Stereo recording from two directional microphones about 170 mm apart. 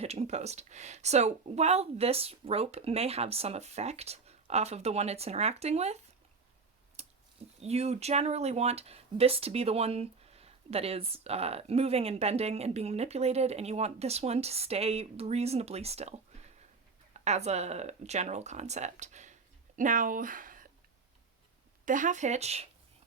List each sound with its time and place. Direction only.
0.0 s speech: 40° right (ahead or behind)
7.0 s clicking: 40° right (ahead or behind)
7.6 s speech: 40° right (ahead or behind)
21.8 s speech: 50° right (ahead or behind)